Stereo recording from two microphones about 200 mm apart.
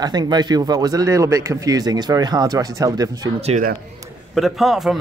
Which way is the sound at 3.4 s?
35° right (ahead or behind).